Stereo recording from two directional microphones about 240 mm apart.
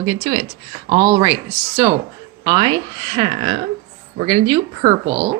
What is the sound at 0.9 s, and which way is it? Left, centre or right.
Speech, centre.